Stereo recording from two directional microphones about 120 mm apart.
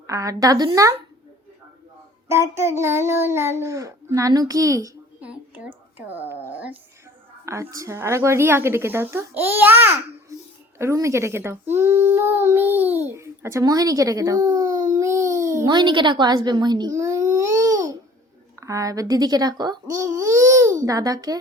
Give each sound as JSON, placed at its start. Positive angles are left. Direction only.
{"t": 0.1, "sound": "a child's voice", "side_deg": -30}
{"t": 2.2, "sound": "a child's voice", "side_deg": -25}
{"t": 5.2, "sound": "a sound", "side_deg": -15}
{"t": 7.4, "sound": "a child's voice", "side_deg": -25}